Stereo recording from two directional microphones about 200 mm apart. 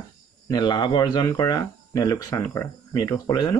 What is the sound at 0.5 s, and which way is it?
Speech, 20° left (ahead or behind).